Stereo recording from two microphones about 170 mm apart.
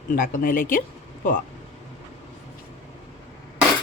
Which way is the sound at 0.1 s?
50° left (ahead or behind).